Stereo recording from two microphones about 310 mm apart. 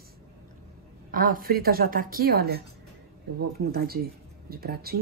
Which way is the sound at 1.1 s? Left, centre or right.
Right.